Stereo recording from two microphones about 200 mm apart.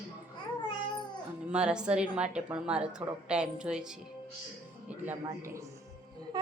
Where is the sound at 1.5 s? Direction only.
5° right (ahead or behind).